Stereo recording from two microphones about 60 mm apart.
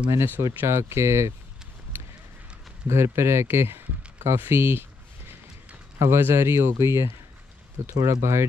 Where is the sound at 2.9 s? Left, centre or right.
Right.